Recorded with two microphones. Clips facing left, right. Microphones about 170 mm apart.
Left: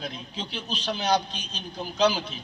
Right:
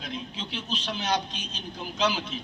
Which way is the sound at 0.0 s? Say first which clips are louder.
Left 1 dB; 35° left (ahead or behind).